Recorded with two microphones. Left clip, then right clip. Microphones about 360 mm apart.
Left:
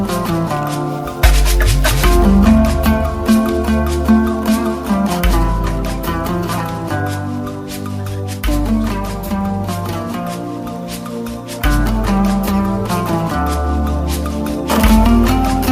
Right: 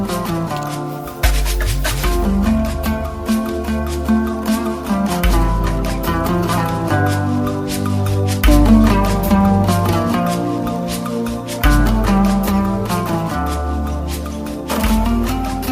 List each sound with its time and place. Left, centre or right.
1.8 s music: left; by 5.4 s centre
6.2 s music: centre
8.4 s music: right
11.6 s music: centre
14.7 s music: left